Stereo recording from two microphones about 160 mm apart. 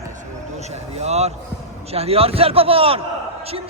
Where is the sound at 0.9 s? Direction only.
40° right (ahead or behind).